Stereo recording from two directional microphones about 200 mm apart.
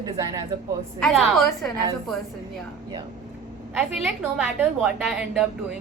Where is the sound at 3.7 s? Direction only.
5° right (ahead or behind).